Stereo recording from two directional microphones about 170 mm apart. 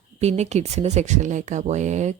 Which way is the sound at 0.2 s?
40° right (ahead or behind).